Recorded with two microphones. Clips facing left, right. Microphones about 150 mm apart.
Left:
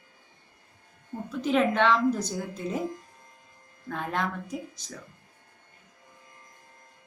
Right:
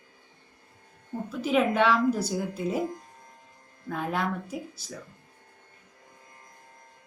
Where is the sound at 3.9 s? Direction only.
5° right (ahead or behind).